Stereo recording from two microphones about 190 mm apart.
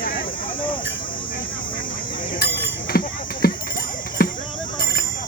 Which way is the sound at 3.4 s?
55° left (ahead or behind).